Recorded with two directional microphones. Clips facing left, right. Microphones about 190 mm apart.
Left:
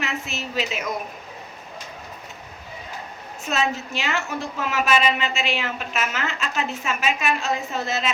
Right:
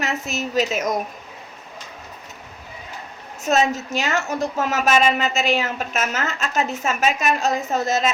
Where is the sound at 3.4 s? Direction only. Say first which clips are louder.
Right 5 dB; 45° right (ahead or behind).